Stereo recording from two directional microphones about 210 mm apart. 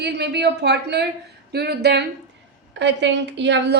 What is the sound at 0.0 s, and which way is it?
A woman's voice, 55° right (ahead or behind).